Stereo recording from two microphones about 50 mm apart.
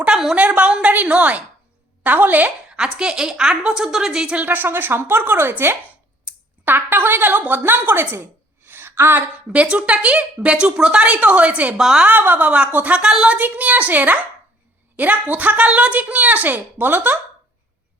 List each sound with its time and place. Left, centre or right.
0.1 s a sound: centre
0.3 s a woman's voice: right
0.6 s a sound: right
2.0 s a woman's voice: right
2.6 s a woman's voice: centre
4.2 s speech: centre
4.4 s a woman's voice: right
8.1 s a sound: right
9.5 s speech: right
11.8 s a woman's voice: centre
12.0 s a woman's voice: right
12.5 s speech: right
13.0 s a woman's voice: centre
13.3 s a woman's voice: right